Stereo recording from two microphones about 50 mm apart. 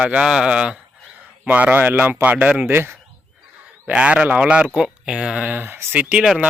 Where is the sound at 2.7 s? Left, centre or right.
Right.